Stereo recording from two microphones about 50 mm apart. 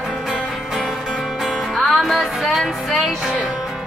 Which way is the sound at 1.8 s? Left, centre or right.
Centre.